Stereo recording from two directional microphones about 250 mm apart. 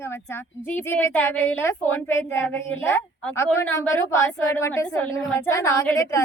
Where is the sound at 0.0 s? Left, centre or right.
Centre.